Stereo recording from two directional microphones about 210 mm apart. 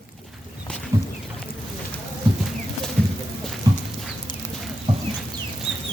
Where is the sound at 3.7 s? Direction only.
20° right (ahead or behind).